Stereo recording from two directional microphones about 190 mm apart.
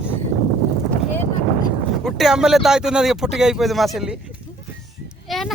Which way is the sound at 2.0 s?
Centre (ahead or behind).